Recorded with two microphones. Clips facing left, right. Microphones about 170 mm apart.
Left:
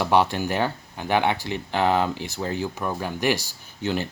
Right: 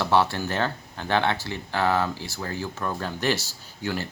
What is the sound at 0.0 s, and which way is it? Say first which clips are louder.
Speech: left 2 dB; 15° left (ahead or behind).